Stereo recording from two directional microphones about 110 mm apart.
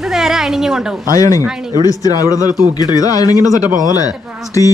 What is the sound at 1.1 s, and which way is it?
A man's voice, 30° left (ahead or behind).